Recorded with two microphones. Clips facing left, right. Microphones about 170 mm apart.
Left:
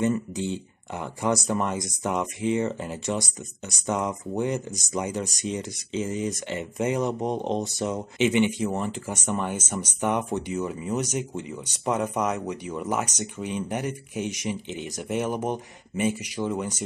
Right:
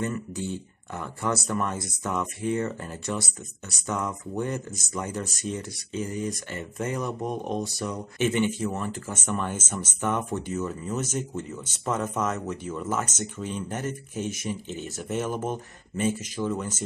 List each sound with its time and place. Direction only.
0.0 s speech: 20° left (ahead or behind)